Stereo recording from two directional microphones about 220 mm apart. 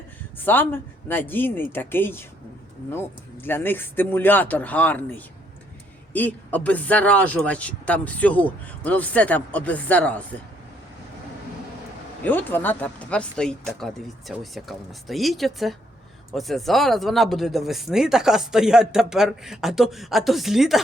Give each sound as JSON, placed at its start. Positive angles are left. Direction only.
{"t": 0.3, "sound": "speech", "side_deg": 10}
{"t": 12.2, "sound": "speech", "side_deg": 10}